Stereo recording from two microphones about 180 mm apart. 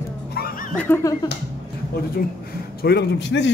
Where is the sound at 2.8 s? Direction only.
75° left (ahead or behind).